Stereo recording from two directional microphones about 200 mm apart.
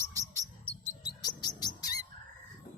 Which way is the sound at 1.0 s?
20° left (ahead or behind).